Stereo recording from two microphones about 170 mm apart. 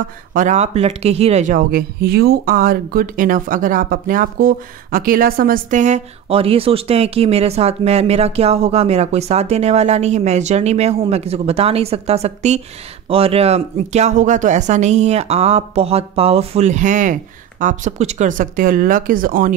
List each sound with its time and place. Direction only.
0.3 s speech: 50° right (ahead or behind)